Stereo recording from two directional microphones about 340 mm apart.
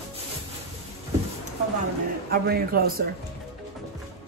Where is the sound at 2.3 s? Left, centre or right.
Right.